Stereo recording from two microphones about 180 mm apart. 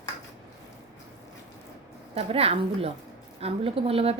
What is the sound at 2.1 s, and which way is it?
A woman's voice, 35° right (ahead or behind).